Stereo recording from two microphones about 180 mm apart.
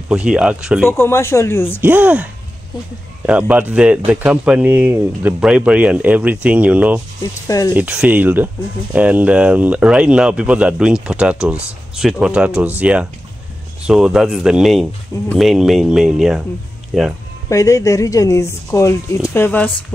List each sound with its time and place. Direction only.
0.1 s speech: 5° right (ahead or behind)
0.8 s speech: 15° left (ahead or behind)
1.8 s speech: 10° right (ahead or behind)
3.3 s speech: 5° right (ahead or behind)
7.4 s speech: 20° left (ahead or behind)
7.7 s speech: 5° right (ahead or behind)
17.5 s speech: 15° left (ahead or behind)